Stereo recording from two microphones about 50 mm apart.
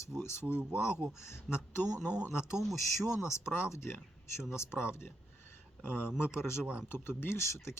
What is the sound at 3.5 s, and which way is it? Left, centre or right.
Speech, left.